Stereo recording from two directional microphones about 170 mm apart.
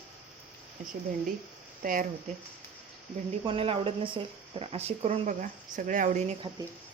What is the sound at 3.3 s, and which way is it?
Speech, 35° right (ahead or behind).